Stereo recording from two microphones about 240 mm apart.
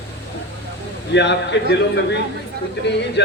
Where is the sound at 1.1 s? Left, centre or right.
Left.